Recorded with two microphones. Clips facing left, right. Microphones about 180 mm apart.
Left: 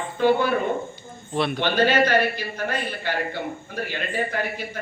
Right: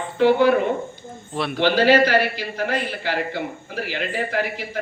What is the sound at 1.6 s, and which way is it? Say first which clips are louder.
Speech: right 4 dB; 80° right.